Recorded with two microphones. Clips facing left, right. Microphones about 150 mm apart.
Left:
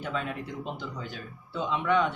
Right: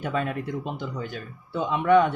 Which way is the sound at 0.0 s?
55° right (ahead or behind).